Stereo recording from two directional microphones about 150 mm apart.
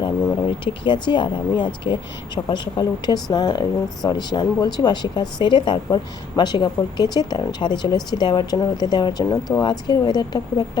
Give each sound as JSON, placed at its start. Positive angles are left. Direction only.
{"t": 0.0, "sound": "a woman's voice", "side_deg": 30}